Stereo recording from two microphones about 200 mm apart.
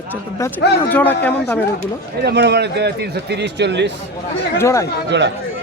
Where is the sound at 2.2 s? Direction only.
55° right (ahead or behind).